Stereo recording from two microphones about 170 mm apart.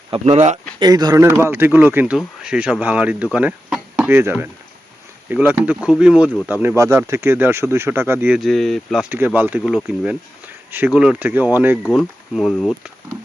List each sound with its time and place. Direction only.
0.1 s speech: 40° right (ahead or behind)
0.8 s speech: 25° right (ahead or behind); by 6.2 s 5° right (ahead or behind)
6.2 s speech: 5° left (ahead or behind)
6.5 s speech: 10° right (ahead or behind)
9.0 s speech: 10° right (ahead or behind)